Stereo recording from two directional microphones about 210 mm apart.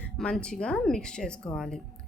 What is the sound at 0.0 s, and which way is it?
A woman's voice, 5° left (ahead or behind).